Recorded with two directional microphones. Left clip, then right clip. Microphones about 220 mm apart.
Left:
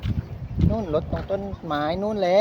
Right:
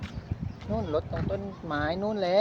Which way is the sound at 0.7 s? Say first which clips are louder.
Left 3 dB; 20° left (ahead or behind).